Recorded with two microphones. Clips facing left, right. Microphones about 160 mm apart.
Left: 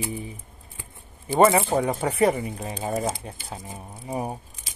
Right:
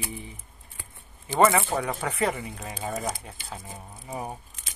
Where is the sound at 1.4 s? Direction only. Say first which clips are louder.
Left 3 dB; 25° left (ahead or behind).